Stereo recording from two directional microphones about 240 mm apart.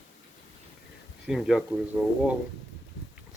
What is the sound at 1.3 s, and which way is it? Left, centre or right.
Speech, centre.